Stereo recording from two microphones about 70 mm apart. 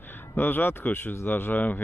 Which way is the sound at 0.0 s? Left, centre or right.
Left.